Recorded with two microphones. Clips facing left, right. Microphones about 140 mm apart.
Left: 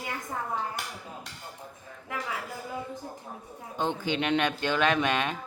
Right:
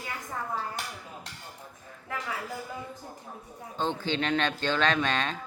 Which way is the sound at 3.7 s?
15° left (ahead or behind).